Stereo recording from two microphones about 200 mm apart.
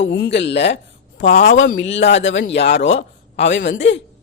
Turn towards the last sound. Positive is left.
turn(degrees=60)  # may be behind; listen again after turning